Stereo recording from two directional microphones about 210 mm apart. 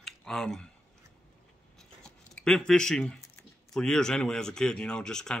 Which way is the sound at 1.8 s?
5° left (ahead or behind).